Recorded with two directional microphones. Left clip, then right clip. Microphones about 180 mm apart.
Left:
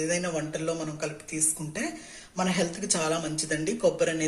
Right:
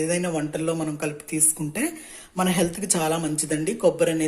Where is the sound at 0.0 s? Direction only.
45° right (ahead or behind).